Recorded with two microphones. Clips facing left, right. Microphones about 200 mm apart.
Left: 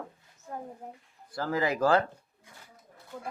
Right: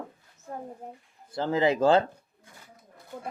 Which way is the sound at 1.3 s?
25° right (ahead or behind).